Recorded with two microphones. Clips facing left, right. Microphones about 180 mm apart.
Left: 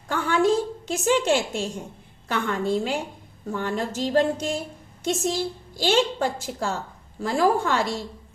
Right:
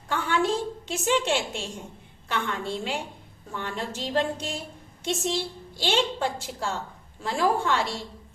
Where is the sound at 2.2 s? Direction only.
40° left (ahead or behind).